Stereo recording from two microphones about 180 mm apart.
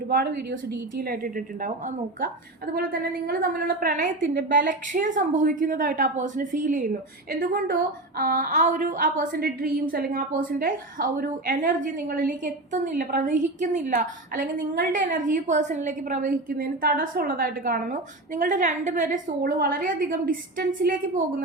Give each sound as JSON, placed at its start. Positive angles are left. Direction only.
{"t": 0.1, "sound": "a woman's voice", "side_deg": -60}
{"t": 2.7, "sound": "a woman's voice", "side_deg": -55}